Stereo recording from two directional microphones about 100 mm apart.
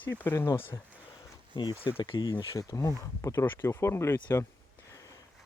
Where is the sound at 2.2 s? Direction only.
45° left (ahead or behind).